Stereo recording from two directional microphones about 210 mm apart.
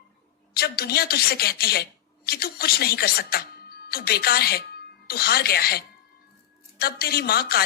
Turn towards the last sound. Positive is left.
turn(degrees=45)  # may be behind; listen again after turning